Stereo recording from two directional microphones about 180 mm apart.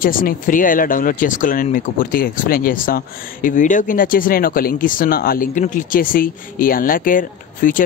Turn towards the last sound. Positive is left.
turn(degrees=50)  # may be behind; listen again after turning